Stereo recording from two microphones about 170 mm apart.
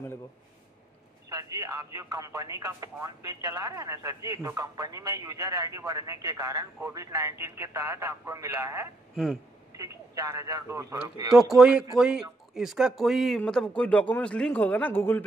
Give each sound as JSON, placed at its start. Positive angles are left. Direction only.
{"t": 1.3, "sound": "speech", "side_deg": -20}
{"t": 9.1, "sound": "speech", "side_deg": 0}
{"t": 9.8, "sound": "speech", "side_deg": -20}
{"t": 11.5, "sound": "speech", "side_deg": -5}